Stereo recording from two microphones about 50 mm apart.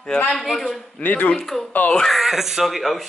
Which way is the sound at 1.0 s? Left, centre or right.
Left.